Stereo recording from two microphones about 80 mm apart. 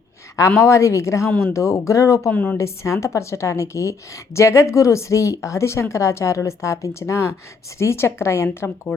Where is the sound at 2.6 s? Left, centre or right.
Left.